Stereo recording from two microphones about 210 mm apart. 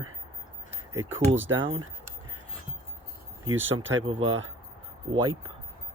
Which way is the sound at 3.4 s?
70° right (ahead or behind).